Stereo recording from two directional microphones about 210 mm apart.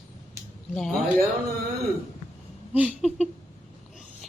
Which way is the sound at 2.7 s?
5° right (ahead or behind).